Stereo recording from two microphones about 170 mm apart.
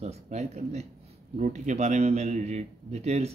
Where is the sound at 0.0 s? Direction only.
40° right (ahead or behind).